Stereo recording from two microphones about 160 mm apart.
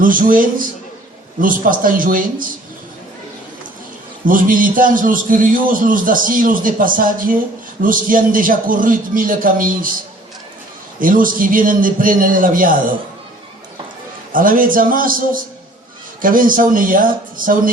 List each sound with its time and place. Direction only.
0.0 s a man's voice: 60° right (ahead or behind)
4.3 s a man's voice: 60° right (ahead or behind)
11.0 s a man's voice: 60° right (ahead or behind)
14.3 s a man's voice: 60° right (ahead or behind)